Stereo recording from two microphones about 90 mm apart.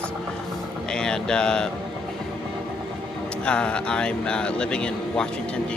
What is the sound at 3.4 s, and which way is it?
Speech, 10° left (ahead or behind).